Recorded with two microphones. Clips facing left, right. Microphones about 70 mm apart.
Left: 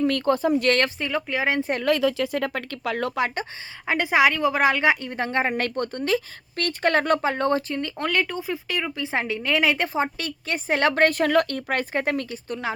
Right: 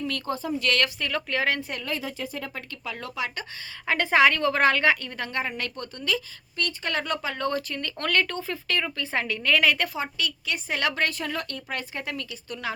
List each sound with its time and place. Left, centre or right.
0.0 s speech: left
0.9 s speech: centre
1.8 s speech: left
3.8 s a woman's voice: centre; by 5.5 s left
5.5 s speech: left
9.9 s a woman's voice: left